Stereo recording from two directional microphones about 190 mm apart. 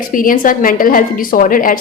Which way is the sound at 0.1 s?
45° left (ahead or behind).